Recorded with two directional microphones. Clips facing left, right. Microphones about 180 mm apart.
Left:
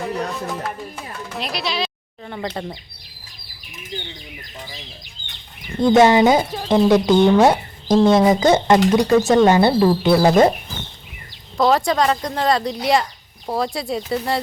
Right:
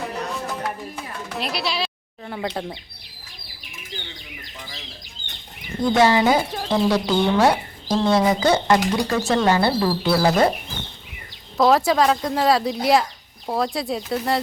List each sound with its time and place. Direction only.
1.4 s speech: 5° right (ahead or behind)
5.8 s speech: 20° left (ahead or behind)
11.5 s speech: centre (ahead or behind)